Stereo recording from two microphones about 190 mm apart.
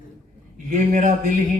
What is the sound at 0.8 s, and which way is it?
Speech, 40° right (ahead or behind).